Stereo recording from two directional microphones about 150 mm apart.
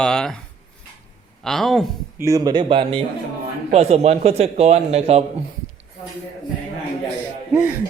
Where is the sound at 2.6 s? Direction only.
35° right (ahead or behind).